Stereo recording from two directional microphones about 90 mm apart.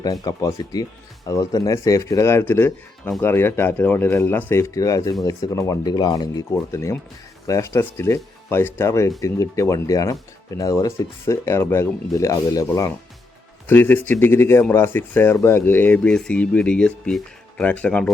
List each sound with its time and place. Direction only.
0.0 s speech: 45° left (ahead or behind); by 4.6 s 25° left (ahead or behind)
4.7 s speech: 40° left (ahead or behind)
6.5 s speech: 35° left (ahead or behind)
12.1 s speech: 40° left (ahead or behind)
13.7 s speech: 20° left (ahead or behind)